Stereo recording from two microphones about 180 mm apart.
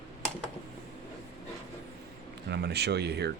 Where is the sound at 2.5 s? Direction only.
65° right (ahead or behind).